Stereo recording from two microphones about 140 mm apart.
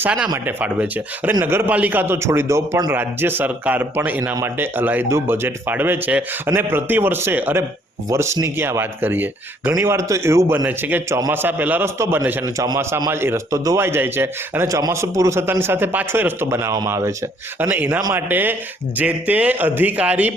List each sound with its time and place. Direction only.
0.0 s speech: 10° right (ahead or behind)